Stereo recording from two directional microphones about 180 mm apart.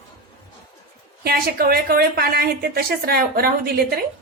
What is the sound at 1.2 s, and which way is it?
A woman's voice, 60° right (ahead or behind).